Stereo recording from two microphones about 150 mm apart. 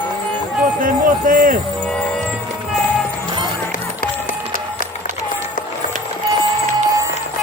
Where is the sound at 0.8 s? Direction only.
65° right (ahead or behind).